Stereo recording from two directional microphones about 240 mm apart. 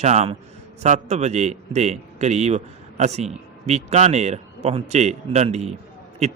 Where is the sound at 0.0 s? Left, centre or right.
Right.